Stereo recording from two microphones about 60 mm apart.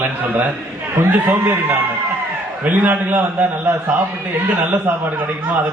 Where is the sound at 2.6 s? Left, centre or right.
Right.